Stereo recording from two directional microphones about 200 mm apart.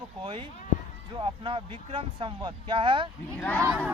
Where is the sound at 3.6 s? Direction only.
5° right (ahead or behind).